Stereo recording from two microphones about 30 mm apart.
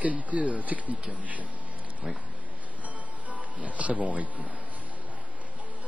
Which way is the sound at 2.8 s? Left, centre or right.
Right.